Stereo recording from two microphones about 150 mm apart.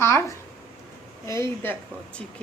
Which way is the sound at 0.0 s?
20° left (ahead or behind).